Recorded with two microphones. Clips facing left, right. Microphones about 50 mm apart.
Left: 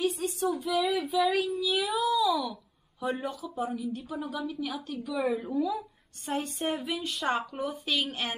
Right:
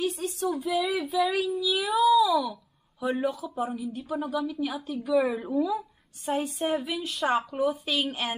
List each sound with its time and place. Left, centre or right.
0.0 s a woman's voice: centre